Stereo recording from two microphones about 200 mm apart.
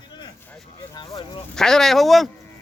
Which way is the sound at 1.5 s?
Centre (ahead or behind).